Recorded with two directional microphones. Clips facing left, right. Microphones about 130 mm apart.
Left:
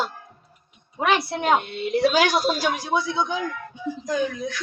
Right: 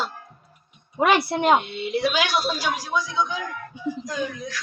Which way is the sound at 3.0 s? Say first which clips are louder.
Left 1 dB; 25° left (ahead or behind).